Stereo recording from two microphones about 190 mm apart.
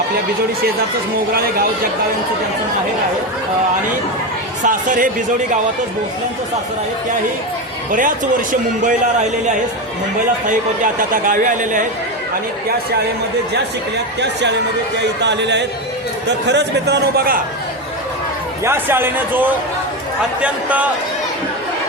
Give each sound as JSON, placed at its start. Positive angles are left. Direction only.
{"t": 4.6, "sound": "speech", "side_deg": -45}
{"t": 7.9, "sound": "speech", "side_deg": -45}
{"t": 11.1, "sound": "speech", "side_deg": -45}
{"t": 15.2, "sound": "a man's voice", "side_deg": -65}
{"t": 18.6, "sound": "a man's voice", "side_deg": -10}